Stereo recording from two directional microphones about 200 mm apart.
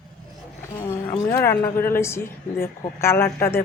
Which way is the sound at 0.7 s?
15° left (ahead or behind).